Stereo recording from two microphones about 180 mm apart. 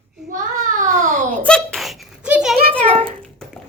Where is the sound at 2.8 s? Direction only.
30° right (ahead or behind).